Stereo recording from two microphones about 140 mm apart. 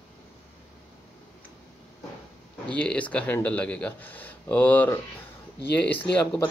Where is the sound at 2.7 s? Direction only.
10° left (ahead or behind).